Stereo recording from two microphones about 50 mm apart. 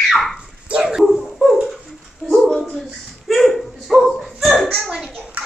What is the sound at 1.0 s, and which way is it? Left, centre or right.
Dog, centre.